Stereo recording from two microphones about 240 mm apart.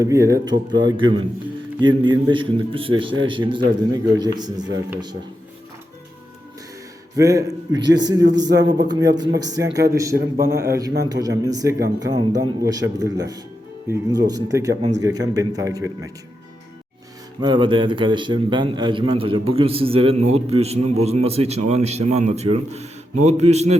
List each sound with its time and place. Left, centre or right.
0.0 s a man's voice: centre
7.2 s a man's voice: centre
8.4 s speech: right
8.9 s a man's voice: centre
10.2 s a man's voice: right
11.0 s a man's voice: centre
17.4 s a man's voice: centre